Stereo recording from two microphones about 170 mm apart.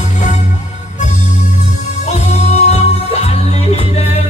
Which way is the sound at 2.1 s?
40° left (ahead or behind).